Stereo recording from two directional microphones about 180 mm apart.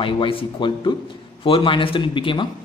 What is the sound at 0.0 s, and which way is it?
A man's voice, 30° left (ahead or behind).